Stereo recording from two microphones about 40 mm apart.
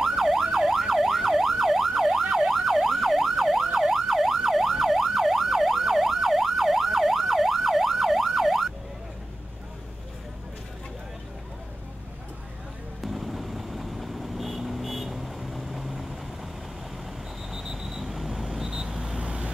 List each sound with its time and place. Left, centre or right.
0.0 s emergency vehicle: centre
13.0 s vehicle: centre
17.5 s vehicle: centre
19.1 s vehicle: right